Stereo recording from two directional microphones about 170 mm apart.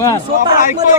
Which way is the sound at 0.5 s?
50° left (ahead or behind).